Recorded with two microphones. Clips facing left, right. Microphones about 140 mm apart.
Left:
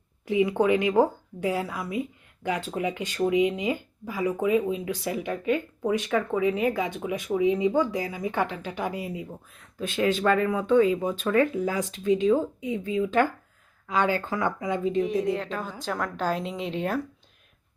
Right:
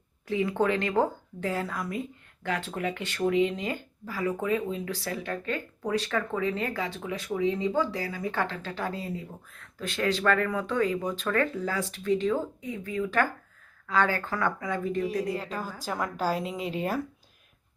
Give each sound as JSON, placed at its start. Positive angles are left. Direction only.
{"t": 0.3, "sound": "speech", "side_deg": 15}
{"t": 15.0, "sound": "a woman's voice", "side_deg": 0}